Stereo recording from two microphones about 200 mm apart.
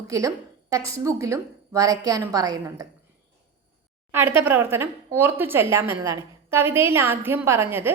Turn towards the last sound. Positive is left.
turn(degrees=-10)  # may be behind; listen again after turning